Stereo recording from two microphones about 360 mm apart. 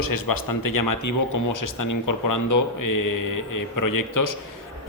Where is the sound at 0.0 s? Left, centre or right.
Left.